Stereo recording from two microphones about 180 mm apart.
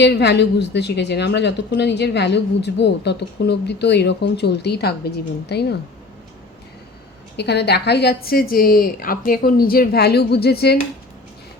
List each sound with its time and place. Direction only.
0.0 s a woman's voice: 70° left (ahead or behind)
7.3 s a woman's voice: 70° left (ahead or behind)